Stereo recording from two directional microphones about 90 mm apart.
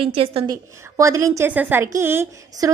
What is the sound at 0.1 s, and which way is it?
Speech, 90° right.